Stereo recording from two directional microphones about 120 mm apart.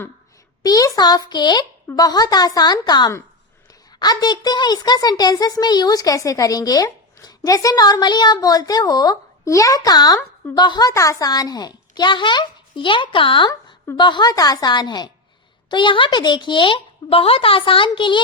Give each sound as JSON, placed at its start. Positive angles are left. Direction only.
{"t": 0.6, "sound": "a woman's voice", "side_deg": 30}
{"t": 10.8, "sound": "a woman's voice", "side_deg": 25}